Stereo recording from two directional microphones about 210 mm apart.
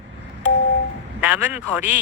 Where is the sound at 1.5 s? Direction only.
10° right (ahead or behind).